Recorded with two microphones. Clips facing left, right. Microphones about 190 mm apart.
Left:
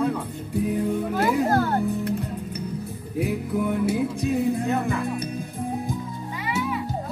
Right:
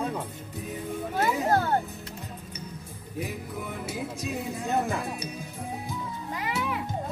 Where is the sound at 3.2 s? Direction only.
65° left (ahead or behind).